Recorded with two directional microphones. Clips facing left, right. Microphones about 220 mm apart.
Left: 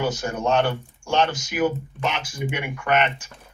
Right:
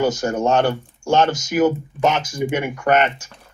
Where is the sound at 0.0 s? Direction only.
45° right (ahead or behind).